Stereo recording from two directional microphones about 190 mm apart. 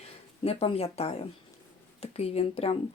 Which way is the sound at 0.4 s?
30° left (ahead or behind).